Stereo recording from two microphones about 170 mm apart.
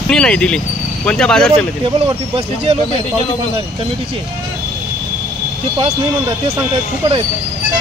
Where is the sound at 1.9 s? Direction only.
35° right (ahead or behind).